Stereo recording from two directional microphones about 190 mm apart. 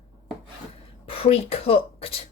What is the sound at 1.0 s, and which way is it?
Speech, 30° left (ahead or behind).